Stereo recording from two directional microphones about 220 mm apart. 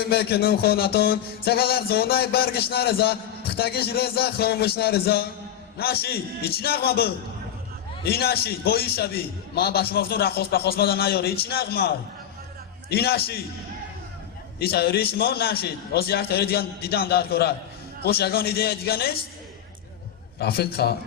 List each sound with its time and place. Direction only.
0.0 s a man's voice: 45° left (ahead or behind)
14.6 s a man's voice: 45° left (ahead or behind)
20.4 s a man's voice: 45° left (ahead or behind)